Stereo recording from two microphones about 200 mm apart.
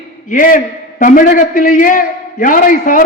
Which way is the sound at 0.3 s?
45° left (ahead or behind).